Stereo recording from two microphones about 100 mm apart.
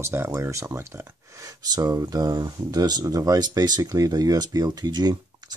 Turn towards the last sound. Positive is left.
turn(degrees=-45)  # may be behind; listen again after turning